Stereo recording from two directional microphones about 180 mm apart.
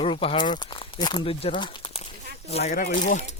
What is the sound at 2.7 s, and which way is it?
Speech, 50° left (ahead or behind).